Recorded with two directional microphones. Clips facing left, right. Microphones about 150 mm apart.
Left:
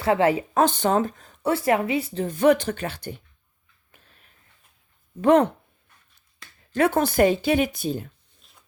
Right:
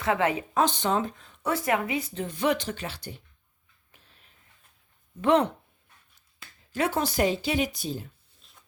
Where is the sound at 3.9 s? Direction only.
55° left (ahead or behind).